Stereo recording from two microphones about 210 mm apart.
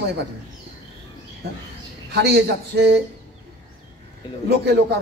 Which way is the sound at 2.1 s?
50° right (ahead or behind).